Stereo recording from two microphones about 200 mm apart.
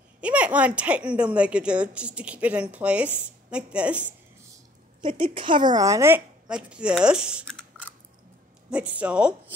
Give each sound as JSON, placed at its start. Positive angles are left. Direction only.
{"t": 0.2, "sound": "speech", "side_deg": -5}
{"t": 5.0, "sound": "speech", "side_deg": -25}
{"t": 8.6, "sound": "a woman's voice", "side_deg": -5}